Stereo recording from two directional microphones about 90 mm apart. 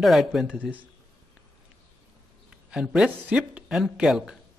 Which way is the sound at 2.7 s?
10° right (ahead or behind).